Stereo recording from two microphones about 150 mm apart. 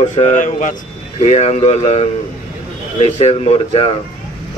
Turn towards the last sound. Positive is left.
turn(degrees=40)  # may be behind; listen again after turning